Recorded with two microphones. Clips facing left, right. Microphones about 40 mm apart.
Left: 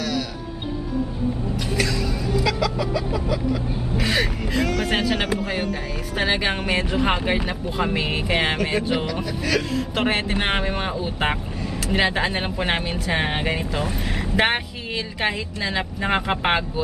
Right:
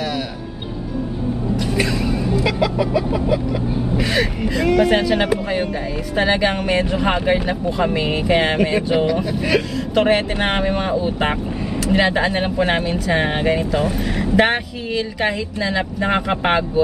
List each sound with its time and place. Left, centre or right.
1.8 s vehicle: right
4.0 s speech: centre
6.1 s speech: centre
8.9 s speech: centre
9.9 s speech: centre